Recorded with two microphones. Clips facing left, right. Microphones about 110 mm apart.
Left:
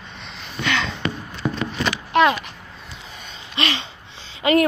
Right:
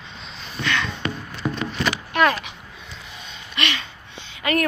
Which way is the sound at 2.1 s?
25° left (ahead or behind).